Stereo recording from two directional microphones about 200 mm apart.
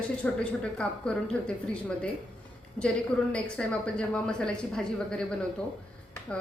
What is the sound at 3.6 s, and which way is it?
A woman's voice, 5° left (ahead or behind).